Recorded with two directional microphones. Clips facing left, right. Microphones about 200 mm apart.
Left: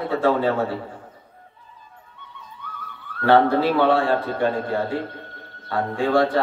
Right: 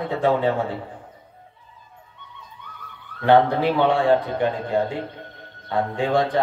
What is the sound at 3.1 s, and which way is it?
Speech, 20° right (ahead or behind).